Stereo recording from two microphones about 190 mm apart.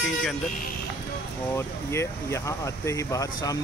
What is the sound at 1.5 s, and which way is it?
Speech, 15° left (ahead or behind).